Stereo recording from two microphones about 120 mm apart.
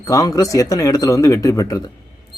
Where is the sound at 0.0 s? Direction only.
30° left (ahead or behind).